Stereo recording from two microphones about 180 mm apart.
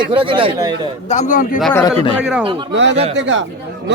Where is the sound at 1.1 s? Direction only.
45° left (ahead or behind).